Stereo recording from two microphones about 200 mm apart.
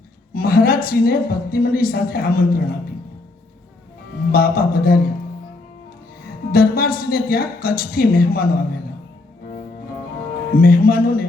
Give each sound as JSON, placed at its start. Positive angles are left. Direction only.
{"t": 0.3, "sound": "a woman's voice", "side_deg": 45}
{"t": 4.3, "sound": "a woman's voice", "side_deg": 45}
{"t": 6.5, "sound": "a woman's voice", "side_deg": 45}
{"t": 10.5, "sound": "a woman's voice", "side_deg": 45}